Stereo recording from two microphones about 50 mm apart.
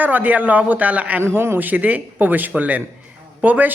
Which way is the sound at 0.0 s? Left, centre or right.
Right.